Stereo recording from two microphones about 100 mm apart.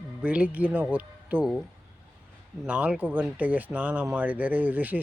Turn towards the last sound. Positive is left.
turn(degrees=-15)  # may be behind; listen again after turning